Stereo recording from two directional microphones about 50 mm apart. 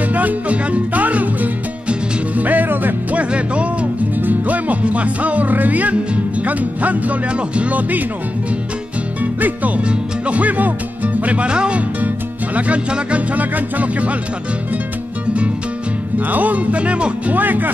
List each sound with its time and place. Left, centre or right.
0.1 s music: right
4.1 s music: right
9.2 s music: right
16.2 s music: right
17.4 s music: right